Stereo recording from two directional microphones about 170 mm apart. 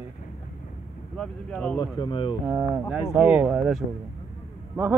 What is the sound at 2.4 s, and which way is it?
Speech, 10° right (ahead or behind).